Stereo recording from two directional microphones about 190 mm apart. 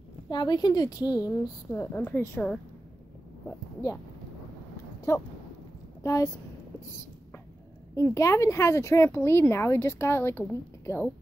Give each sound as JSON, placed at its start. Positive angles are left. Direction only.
{"t": 0.3, "sound": "a woman's voice", "side_deg": 20}
{"t": 5.1, "sound": "speech", "side_deg": 15}
{"t": 7.9, "sound": "speech", "side_deg": 15}